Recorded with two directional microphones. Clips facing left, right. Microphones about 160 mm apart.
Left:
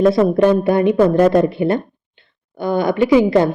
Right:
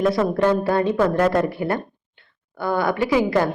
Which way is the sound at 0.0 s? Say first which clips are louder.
Left 6 dB; 25° left (ahead or behind).